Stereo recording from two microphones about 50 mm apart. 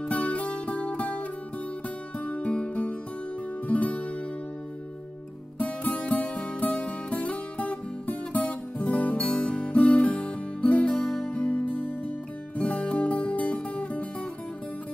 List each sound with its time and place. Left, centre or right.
0.0 s music: left
5.6 s music: left